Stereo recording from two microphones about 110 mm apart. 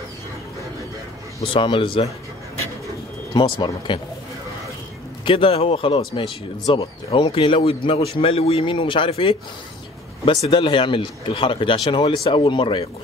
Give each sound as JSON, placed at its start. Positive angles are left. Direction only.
{"t": 1.4, "sound": "a man's voice", "side_deg": 55}
{"t": 3.3, "sound": "speech", "side_deg": 50}
{"t": 5.2, "sound": "a man's voice", "side_deg": 55}